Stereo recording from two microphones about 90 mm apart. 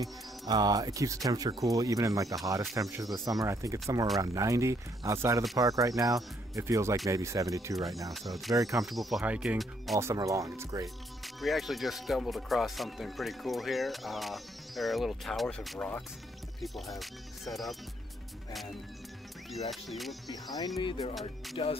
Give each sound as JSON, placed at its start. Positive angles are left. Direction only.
{"t": 0.0, "sound": "speech", "side_deg": -50}
{"t": 7.7, "sound": "speech", "side_deg": 0}
{"t": 9.2, "sound": "speech", "side_deg": -15}
{"t": 10.1, "sound": "speech", "side_deg": -40}
{"t": 11.4, "sound": "speech", "side_deg": 0}
{"t": 15.8, "sound": "speech", "side_deg": 10}
{"t": 16.6, "sound": "speech", "side_deg": 0}
{"t": 20.5, "sound": "speech", "side_deg": 45}
{"t": 20.8, "sound": "speech", "side_deg": 70}
{"t": 21.1, "sound": "speech", "side_deg": 0}